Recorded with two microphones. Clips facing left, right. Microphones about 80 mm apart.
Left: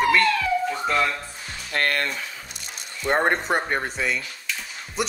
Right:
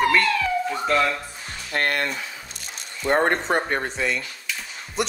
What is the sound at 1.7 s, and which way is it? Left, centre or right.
Speech, right.